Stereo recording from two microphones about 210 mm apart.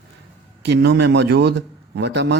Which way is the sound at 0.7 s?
55° right (ahead or behind).